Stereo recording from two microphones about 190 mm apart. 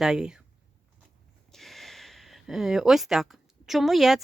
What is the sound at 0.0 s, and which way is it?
Speech, 5° right (ahead or behind).